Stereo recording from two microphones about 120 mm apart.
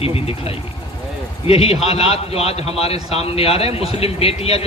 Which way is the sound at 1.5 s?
55° left (ahead or behind).